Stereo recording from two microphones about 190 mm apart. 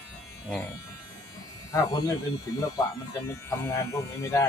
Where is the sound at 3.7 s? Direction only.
15° left (ahead or behind).